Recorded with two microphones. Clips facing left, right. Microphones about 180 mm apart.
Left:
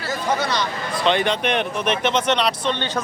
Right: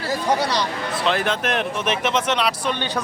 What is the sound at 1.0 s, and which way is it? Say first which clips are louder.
Speech: left 3 dB; centre (ahead or behind).